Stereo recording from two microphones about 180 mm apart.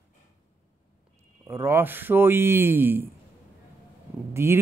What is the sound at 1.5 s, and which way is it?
Speech, 15° right (ahead or behind).